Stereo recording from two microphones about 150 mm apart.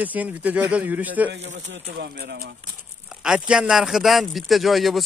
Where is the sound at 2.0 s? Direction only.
90° right.